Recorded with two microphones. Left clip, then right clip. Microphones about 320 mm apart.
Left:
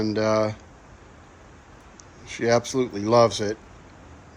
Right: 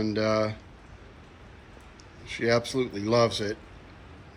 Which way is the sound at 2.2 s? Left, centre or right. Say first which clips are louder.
Left 4 dB; left.